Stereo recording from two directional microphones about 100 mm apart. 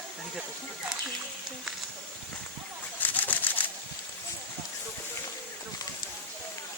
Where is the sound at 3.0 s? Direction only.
15° left (ahead or behind).